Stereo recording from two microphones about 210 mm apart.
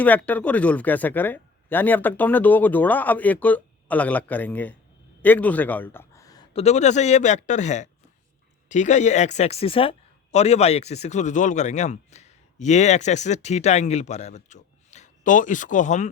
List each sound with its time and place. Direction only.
0.0 s a man's voice: 10° left (ahead or behind); by 16.0 s 35° left (ahead or behind)